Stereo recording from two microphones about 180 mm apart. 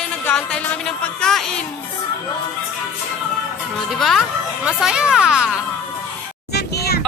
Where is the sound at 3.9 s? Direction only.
Centre (ahead or behind).